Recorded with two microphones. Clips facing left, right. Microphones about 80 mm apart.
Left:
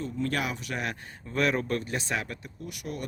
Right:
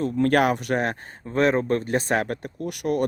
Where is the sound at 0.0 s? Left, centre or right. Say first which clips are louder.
Right 11 dB; right.